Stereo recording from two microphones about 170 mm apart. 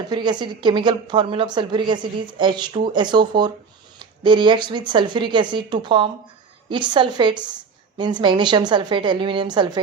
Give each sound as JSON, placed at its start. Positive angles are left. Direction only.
{"t": 0.1, "sound": "a woman's voice", "side_deg": -25}